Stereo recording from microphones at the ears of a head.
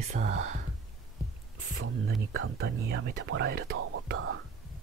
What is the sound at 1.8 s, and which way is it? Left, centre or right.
Speech, right.